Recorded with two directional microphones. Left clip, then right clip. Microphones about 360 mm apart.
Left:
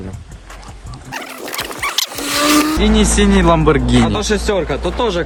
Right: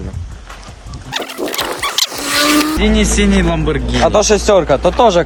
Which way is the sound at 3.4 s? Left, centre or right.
Centre.